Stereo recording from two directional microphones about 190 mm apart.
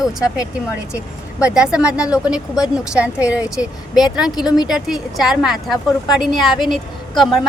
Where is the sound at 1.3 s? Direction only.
5° right (ahead or behind).